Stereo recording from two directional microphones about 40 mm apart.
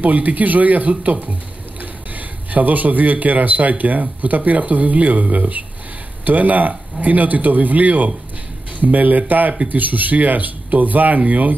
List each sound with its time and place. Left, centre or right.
0.0 s speech: right